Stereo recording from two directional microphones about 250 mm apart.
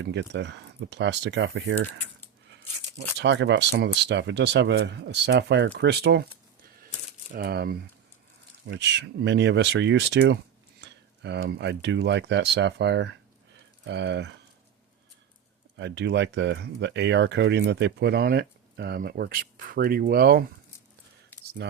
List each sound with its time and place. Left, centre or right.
0.0 s speech: right
3.2 s speech: right
7.3 s speech: right
15.8 s speech: right
21.6 s speech: right